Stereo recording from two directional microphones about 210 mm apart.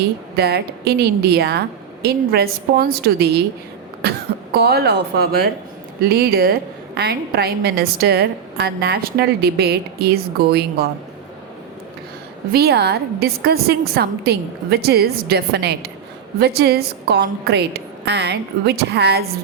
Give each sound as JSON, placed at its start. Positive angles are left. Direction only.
{"t": 0.3, "sound": "a woman's voice", "side_deg": -50}
{"t": 4.0, "sound": "cough", "side_deg": -45}
{"t": 4.5, "sound": "a woman's voice", "side_deg": -50}
{"t": 12.5, "sound": "a woman's voice", "side_deg": -50}